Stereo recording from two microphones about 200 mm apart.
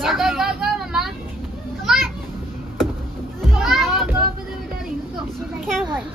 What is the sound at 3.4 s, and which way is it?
Children playing, centre (ahead or behind).